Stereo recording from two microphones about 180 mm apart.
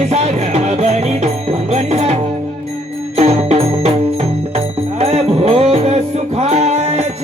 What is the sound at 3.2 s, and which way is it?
Music, 35° right (ahead or behind).